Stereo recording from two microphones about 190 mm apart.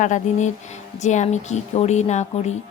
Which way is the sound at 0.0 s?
40° left (ahead or behind).